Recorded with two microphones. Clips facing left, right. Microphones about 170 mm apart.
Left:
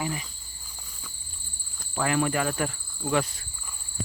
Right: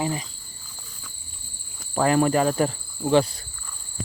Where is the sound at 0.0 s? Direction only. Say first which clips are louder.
Right 5 dB; 30° right (ahead or behind).